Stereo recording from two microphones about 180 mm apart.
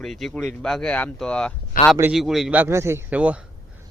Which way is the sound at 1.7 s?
50° left (ahead or behind).